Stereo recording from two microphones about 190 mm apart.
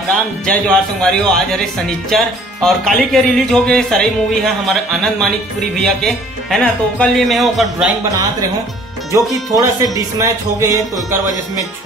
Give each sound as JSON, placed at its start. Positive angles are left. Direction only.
{"t": 0.5, "sound": "speech", "side_deg": 5}
{"t": 9.1, "sound": "music", "side_deg": -15}